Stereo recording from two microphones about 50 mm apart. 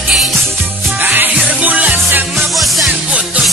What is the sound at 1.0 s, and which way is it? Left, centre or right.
Music, right.